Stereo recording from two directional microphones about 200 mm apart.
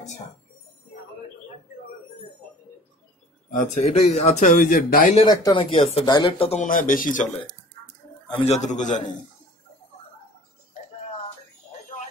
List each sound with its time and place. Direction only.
3.7 s speech: 35° left (ahead or behind)
5.2 s speech: 20° left (ahead or behind); by 7.2 s 40° left (ahead or behind)
8.4 s speech: 35° left (ahead or behind)